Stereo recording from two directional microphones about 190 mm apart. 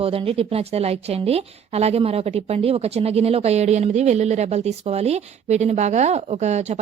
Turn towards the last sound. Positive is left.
turn(degrees=-35)  # may be behind; listen again after turning